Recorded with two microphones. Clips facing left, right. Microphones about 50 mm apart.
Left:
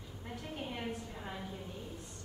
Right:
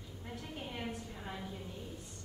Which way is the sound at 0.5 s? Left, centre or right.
Centre.